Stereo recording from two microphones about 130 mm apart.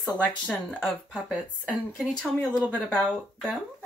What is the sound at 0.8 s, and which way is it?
Speech, 5° right (ahead or behind).